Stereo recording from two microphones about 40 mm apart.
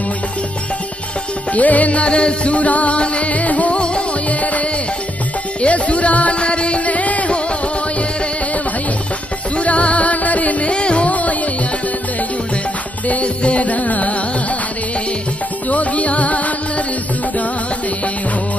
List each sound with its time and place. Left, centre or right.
1.5 s music: left
4.3 s music: left
9.6 s music: left
10.7 s music: left
13.1 s music: left
15.7 s music: left